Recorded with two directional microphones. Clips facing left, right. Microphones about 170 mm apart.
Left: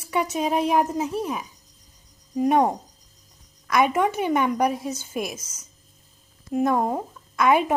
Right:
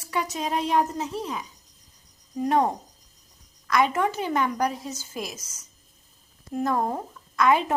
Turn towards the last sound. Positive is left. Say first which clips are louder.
# left 1 dB
turn(degrees=10)  # may be behind; listen again after turning